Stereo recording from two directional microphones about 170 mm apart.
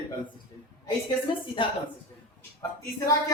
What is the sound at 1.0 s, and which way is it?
Speech, 30° left (ahead or behind).